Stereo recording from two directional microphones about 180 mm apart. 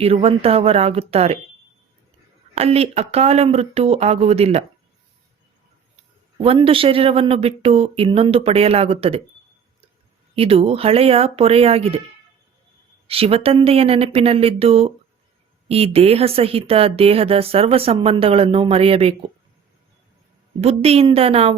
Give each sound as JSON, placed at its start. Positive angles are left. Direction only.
{"t": 0.0, "sound": "speech", "side_deg": -35}
{"t": 2.6, "sound": "speech", "side_deg": -35}
{"t": 6.4, "sound": "speech", "side_deg": -30}
{"t": 10.3, "sound": "speech", "side_deg": -30}
{"t": 13.1, "sound": "speech", "side_deg": -35}
{"t": 20.6, "sound": "speech", "side_deg": -35}